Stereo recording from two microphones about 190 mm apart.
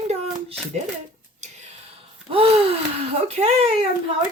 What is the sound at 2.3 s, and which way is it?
Speech, 30° right (ahead or behind).